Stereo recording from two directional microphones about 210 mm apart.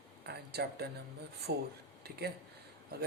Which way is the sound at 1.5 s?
50° right (ahead or behind).